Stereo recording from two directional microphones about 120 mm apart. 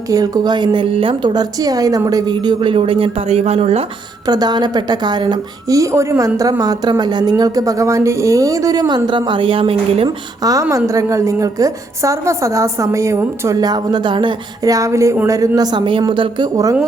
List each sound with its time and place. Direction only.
0.1 s a woman's voice: 30° right (ahead or behind); by 3.8 s 60° right (ahead or behind)
4.3 s a woman's voice: 35° right (ahead or behind)
10.4 s a woman's voice: 30° right (ahead or behind)
14.6 s a woman's voice: 30° right (ahead or behind)